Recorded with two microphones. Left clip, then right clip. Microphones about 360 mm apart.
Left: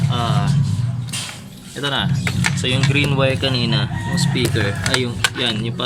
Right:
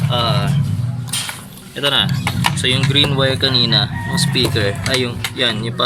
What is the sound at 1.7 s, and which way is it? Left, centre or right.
Speech, centre.